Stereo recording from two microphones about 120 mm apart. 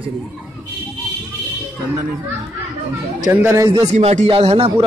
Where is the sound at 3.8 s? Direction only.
75° right (ahead or behind); by 4.8 s 55° right (ahead or behind).